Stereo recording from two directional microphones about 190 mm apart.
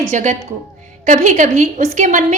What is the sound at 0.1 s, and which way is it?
A woman's voice, 40° right (ahead or behind).